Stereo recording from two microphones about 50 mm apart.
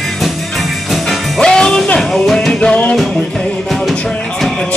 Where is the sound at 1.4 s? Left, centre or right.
Centre.